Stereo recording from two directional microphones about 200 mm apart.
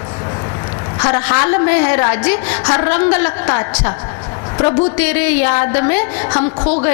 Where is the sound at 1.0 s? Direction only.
20° left (ahead or behind).